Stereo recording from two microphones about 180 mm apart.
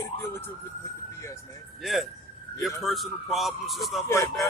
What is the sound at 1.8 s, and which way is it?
A man's voice, centre (ahead or behind).